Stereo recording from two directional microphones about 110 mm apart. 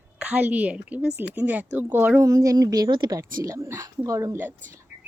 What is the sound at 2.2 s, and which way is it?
A woman's voice, 30° right (ahead or behind).